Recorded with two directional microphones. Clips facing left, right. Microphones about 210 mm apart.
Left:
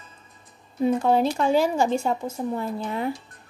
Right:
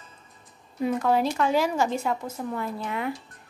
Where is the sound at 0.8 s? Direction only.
30° left (ahead or behind).